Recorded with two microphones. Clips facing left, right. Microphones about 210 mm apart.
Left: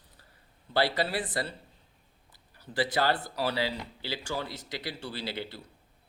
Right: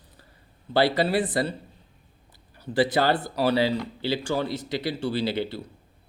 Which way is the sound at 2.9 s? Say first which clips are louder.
Right 2 dB; 25° right (ahead or behind).